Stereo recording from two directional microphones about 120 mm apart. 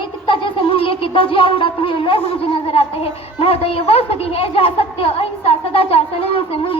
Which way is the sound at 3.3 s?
55° left (ahead or behind).